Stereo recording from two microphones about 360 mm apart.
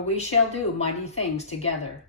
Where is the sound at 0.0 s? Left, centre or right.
Centre.